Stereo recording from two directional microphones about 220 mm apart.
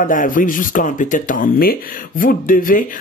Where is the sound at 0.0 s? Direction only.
35° left (ahead or behind).